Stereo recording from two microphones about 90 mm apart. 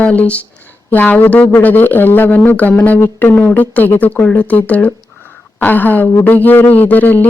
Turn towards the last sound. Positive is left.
turn(degrees=20)  # may be behind; listen again after turning